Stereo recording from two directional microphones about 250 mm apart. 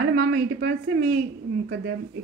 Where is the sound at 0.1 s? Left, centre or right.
Right.